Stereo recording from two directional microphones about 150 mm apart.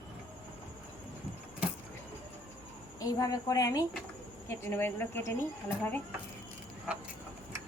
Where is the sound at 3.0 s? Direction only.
25° left (ahead or behind).